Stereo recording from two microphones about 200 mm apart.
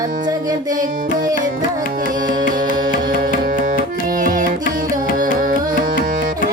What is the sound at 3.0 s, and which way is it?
Tabla, 45° right (ahead or behind).